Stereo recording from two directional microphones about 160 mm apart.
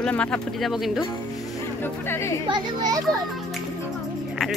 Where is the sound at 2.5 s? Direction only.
25° right (ahead or behind).